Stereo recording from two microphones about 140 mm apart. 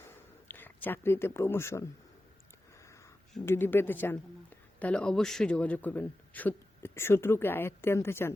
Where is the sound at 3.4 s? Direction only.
15° left (ahead or behind).